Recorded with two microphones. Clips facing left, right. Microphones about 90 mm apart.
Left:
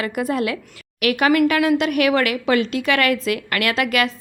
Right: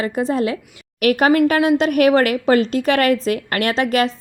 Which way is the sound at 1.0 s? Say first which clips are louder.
Right 2 dB; 40° right (ahead or behind).